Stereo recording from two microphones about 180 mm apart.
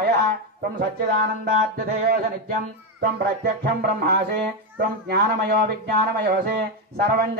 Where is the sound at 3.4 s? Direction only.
60° right (ahead or behind).